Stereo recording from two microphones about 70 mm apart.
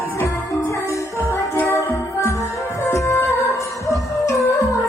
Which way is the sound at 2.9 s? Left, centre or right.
Left.